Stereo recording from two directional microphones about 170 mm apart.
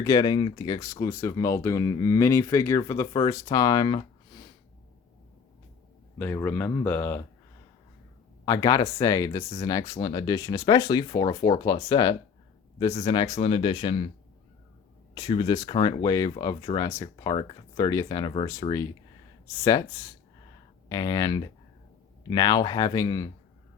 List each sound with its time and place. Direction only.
0.0 s speech: 25° left (ahead or behind)
6.1 s speech: 10° left (ahead or behind)
8.4 s speech: 20° left (ahead or behind)
15.1 s speech: 30° left (ahead or behind)